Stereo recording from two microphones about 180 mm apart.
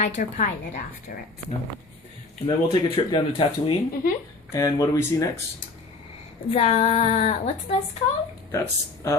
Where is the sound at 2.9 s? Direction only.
30° left (ahead or behind).